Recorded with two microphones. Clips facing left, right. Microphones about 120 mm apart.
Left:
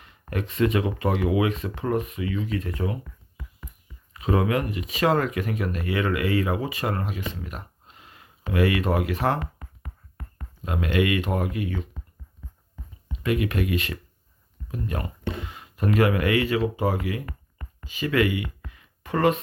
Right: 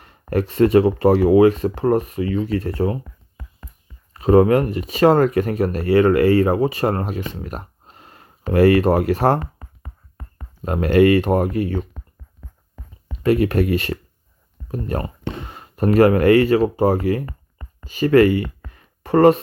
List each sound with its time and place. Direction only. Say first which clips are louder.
0.0 s speech: right 10 dB; 40° right (ahead or behind)
4.1 s speech: right 10 dB; 40° right (ahead or behind)
10.6 s speech: right 9 dB; 45° right (ahead or behind)
13.1 s speech: right 8 dB; 40° right (ahead or behind)
17.2 s a sound: right 4 dB; 25° right (ahead or behind)
17.8 s speech: right 10 dB; 40° right (ahead or behind)